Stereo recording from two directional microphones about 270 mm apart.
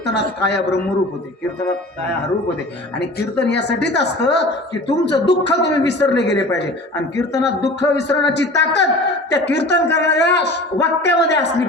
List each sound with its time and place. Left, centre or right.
0.0 s a woman's voice: left
3.0 s a woman's voice: left
7.3 s a woman's voice: left